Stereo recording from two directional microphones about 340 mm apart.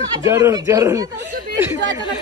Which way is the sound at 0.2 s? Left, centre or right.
Centre.